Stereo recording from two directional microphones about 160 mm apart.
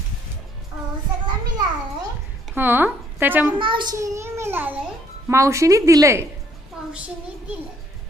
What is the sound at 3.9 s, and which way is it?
A child's voice, 20° right (ahead or behind).